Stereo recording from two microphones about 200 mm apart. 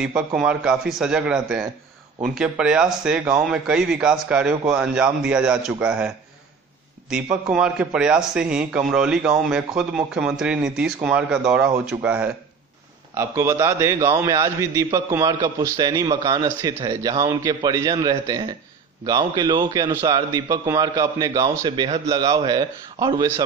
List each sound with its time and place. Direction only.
0.0 s a man's voice: 5° right (ahead or behind)